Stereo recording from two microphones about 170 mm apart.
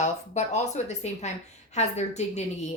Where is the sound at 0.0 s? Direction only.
45° left (ahead or behind).